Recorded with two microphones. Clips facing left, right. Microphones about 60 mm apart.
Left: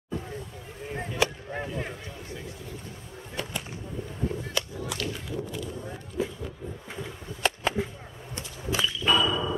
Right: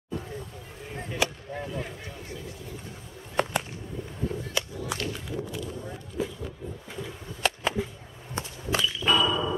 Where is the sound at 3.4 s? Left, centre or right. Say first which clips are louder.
Right 9 dB; right.